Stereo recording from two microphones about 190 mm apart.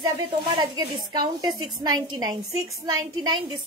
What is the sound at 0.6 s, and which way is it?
A woman's voice, 20° right (ahead or behind).